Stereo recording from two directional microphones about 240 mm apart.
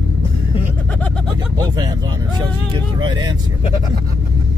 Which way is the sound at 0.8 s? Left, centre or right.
Centre.